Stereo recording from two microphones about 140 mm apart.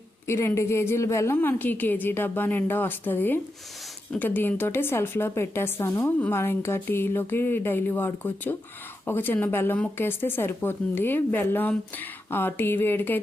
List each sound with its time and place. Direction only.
0.3 s a woman's voice: 20° left (ahead or behind)